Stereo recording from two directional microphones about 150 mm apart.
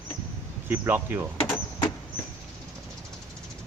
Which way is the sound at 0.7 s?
15° right (ahead or behind).